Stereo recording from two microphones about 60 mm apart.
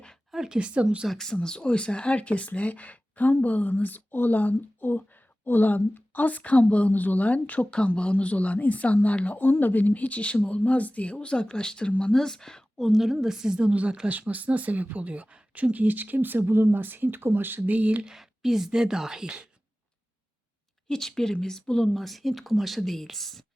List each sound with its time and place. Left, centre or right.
0.3 s speech: centre
1.0 s speech: centre; by 18.0 s right
18.0 s speech: centre
20.8 s speech: centre